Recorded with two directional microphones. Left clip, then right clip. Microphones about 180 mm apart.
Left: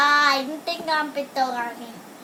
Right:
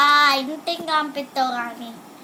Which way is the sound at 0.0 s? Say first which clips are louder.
Right 2 dB; centre (ahead or behind).